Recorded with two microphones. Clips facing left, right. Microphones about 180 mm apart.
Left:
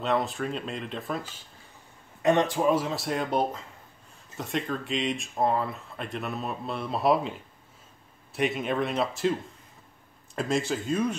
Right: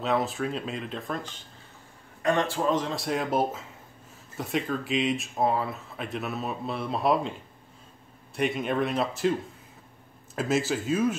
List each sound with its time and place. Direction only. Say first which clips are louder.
0.0 s speech: even; centre (ahead or behind)
2.2 s speech: left 3 dB; 20° left (ahead or behind); by 7.3 s centre (ahead or behind)
8.4 s speech: right 1 dB; centre (ahead or behind)